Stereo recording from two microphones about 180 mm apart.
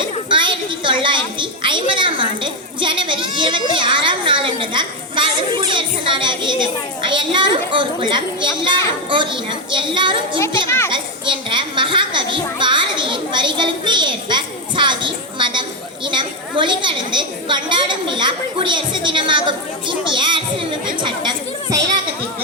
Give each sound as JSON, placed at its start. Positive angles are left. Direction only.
{"t": 0.3, "sound": "a woman's voice", "side_deg": -25}
{"t": 10.7, "sound": "a child's voice", "side_deg": 15}
{"t": 10.9, "sound": "a woman's voice", "side_deg": -25}